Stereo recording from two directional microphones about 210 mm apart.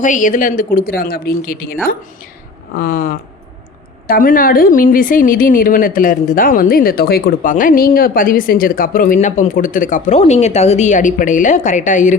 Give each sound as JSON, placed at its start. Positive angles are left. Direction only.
{"t": 0.0, "sound": "a woman's voice", "side_deg": 40}